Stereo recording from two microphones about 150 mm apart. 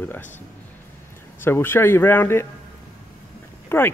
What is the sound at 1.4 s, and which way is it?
Speech, 15° left (ahead or behind).